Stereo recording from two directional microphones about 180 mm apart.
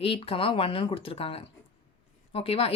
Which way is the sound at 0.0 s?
30° left (ahead or behind).